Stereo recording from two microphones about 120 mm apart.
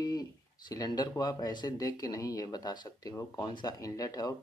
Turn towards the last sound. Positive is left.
turn(degrees=30)  # may be behind; listen again after turning